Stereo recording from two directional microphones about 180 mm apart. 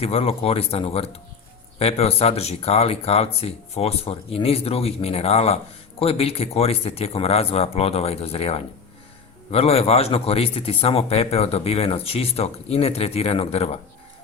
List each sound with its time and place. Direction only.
0.0 s a man's voice: 30° left (ahead or behind)